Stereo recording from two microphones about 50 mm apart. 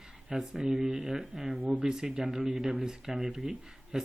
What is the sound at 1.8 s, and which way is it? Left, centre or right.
Speech, centre.